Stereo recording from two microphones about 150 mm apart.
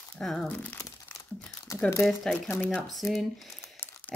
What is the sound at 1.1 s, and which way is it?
Crumpling, 5° left (ahead or behind).